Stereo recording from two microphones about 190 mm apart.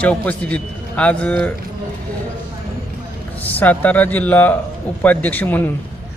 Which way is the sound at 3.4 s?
10° left (ahead or behind).